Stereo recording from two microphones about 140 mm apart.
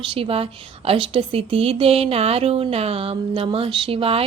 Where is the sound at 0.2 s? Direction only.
45° right (ahead or behind).